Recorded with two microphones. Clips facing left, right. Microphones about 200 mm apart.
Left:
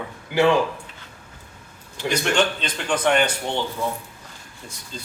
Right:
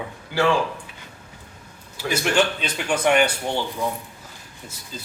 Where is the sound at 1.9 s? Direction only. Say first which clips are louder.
Even; 5° right (ahead or behind).